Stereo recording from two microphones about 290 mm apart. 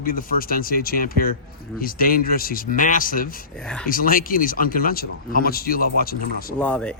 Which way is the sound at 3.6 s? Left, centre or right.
Centre.